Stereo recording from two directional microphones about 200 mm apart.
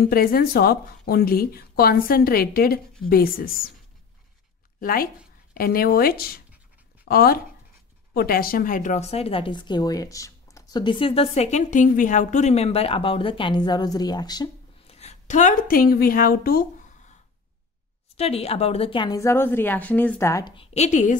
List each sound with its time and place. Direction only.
0.0 s a woman's voice: 50° left (ahead or behind)
4.7 s a woman's voice: 45° left (ahead or behind); by 14.5 s 20° left (ahead or behind)
14.9 s speech: 35° left (ahead or behind)
18.1 s a woman's voice: 30° left (ahead or behind)